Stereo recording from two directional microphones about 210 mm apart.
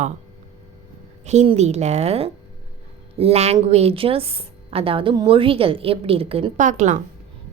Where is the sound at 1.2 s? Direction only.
30° right (ahead or behind).